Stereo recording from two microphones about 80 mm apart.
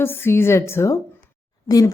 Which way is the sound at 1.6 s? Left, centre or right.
Left.